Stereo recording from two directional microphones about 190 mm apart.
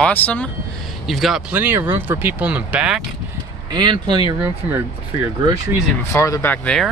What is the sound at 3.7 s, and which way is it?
Speech, 25° right (ahead or behind).